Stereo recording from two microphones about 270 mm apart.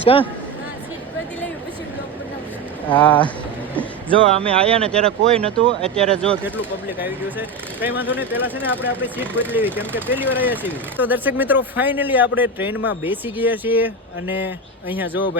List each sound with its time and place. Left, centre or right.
0.0 s a man's voice: centre
3.0 s speech: centre
4.2 s speech: right
5.3 s speech: centre